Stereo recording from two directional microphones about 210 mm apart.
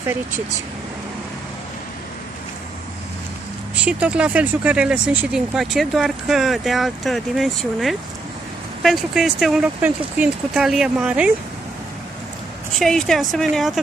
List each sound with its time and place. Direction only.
3.8 s speech: 5° right (ahead or behind)
12.7 s speech: centre (ahead or behind)